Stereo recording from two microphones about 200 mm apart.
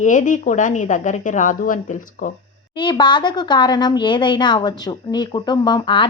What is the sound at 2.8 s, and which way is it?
Speech, 25° left (ahead or behind).